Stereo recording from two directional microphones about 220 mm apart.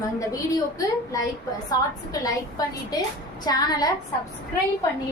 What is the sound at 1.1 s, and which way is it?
A woman's voice, 15° left (ahead or behind).